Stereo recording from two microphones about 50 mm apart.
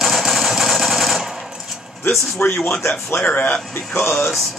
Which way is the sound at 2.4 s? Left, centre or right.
Left.